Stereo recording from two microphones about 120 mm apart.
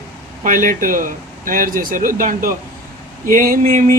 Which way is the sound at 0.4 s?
90° right.